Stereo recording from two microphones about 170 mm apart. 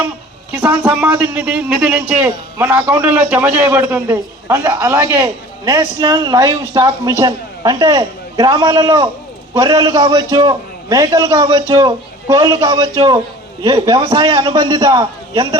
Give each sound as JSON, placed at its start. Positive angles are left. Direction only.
{"t": 0.5, "sound": "a man's voice", "side_deg": -10}